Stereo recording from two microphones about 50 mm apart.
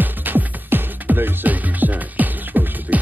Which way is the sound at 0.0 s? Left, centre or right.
Right.